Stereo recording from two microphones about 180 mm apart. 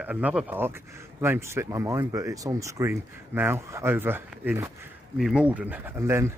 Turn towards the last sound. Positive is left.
turn(degrees=-15)  # may be behind; listen again after turning